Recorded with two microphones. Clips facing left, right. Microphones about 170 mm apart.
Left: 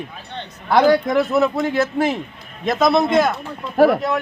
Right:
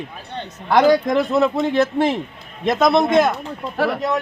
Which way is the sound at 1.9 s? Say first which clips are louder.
Right 1 dB; centre (ahead or behind).